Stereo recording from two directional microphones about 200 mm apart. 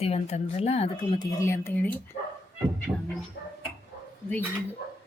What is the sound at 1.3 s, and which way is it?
Speech, 15° left (ahead or behind).